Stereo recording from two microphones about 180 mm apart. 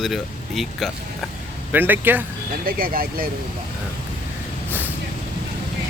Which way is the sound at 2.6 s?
55° right (ahead or behind).